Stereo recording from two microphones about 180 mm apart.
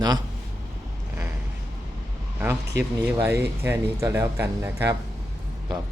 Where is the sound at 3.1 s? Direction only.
15° right (ahead or behind).